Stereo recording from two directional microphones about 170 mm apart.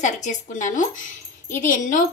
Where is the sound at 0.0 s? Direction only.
45° left (ahead or behind).